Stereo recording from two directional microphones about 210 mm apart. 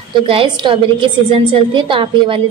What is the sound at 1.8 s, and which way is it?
Speech, 25° right (ahead or behind).